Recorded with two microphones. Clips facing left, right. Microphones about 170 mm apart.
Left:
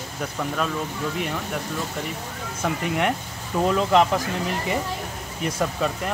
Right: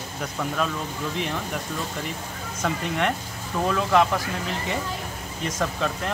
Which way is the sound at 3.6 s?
20° left (ahead or behind).